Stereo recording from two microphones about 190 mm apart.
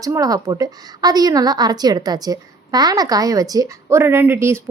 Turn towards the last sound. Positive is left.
turn(degrees=-15)  # may be behind; listen again after turning